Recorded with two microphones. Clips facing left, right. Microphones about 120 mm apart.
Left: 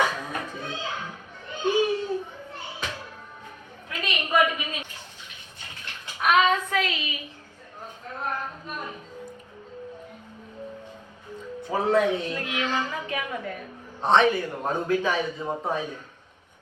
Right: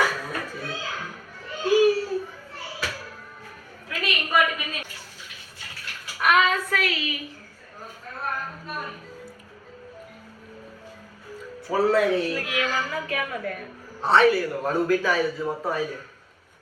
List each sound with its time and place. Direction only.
0.0 s children playing: 20° left (ahead or behind)
1.6 s a sound: 20° left (ahead or behind)
11.3 s a woman's voice: 20° left (ahead or behind)